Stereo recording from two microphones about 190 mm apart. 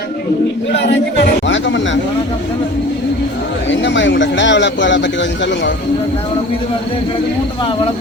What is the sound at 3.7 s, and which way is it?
A man's voice, 70° left (ahead or behind).